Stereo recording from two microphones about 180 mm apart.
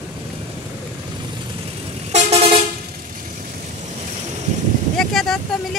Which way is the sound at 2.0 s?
35° right (ahead or behind).